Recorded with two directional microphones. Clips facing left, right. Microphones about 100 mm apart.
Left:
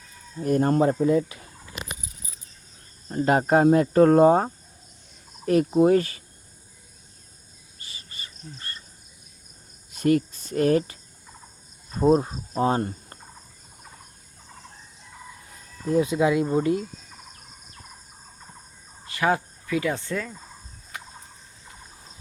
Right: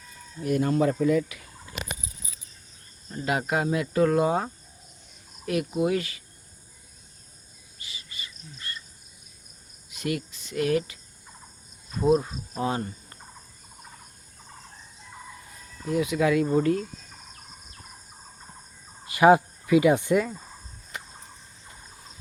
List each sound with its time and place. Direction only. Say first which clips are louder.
0.4 s speech: left 3 dB; 40° left (ahead or behind)
3.1 s speech: left 7 dB; 40° left (ahead or behind)
7.8 s insect: even; 45° left (ahead or behind)
9.9 s speech: left 9 dB; 40° left (ahead or behind)
15.9 s speech: left 2 dB; 30° left (ahead or behind)
19.0 s speech: right 7 dB; 20° right (ahead or behind)